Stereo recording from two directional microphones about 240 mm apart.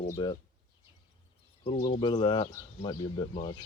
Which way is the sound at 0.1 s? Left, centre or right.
Centre.